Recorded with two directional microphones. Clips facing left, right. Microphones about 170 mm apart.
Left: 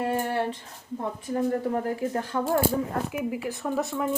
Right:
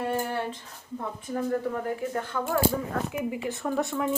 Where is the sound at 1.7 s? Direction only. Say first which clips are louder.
Left 3 dB; 35° left (ahead or behind).